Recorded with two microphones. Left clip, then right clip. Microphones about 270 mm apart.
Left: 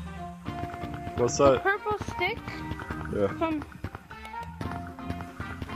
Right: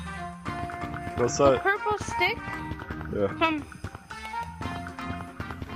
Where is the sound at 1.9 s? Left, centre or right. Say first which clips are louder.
Right 3 dB; centre.